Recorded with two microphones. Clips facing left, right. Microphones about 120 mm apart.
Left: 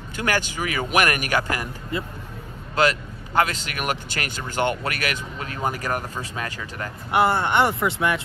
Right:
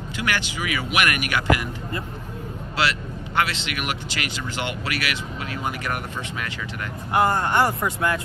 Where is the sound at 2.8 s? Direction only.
40° left (ahead or behind).